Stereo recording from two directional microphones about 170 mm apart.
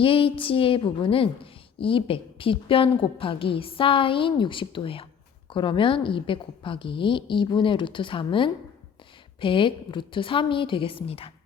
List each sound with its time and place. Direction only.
0.0 s a woman's voice: 30° left (ahead or behind)